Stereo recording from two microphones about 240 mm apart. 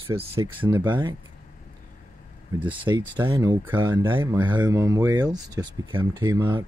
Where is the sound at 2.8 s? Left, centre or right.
Centre.